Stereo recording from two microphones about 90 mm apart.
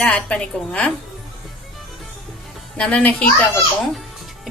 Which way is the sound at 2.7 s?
15° left (ahead or behind).